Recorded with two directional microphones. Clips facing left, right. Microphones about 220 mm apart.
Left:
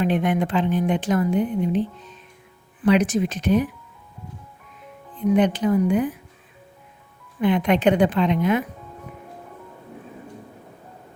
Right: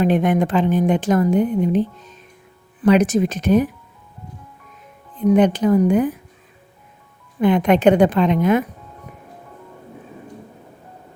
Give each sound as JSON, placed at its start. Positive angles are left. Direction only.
{"t": 0.0, "sound": "a woman's voice", "side_deg": -45}
{"t": 5.3, "sound": "a woman's voice", "side_deg": -45}
{"t": 7.4, "sound": "a woman's voice", "side_deg": -45}